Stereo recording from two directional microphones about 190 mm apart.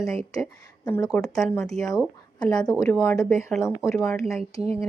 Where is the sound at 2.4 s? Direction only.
20° left (ahead or behind).